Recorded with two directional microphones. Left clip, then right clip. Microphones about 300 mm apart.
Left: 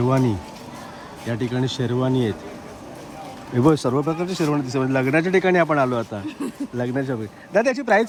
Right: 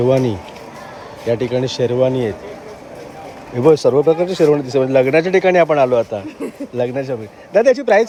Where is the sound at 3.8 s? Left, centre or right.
Left.